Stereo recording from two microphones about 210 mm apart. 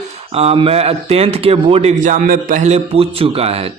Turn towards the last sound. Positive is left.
turn(degrees=-30)  # may be behind; listen again after turning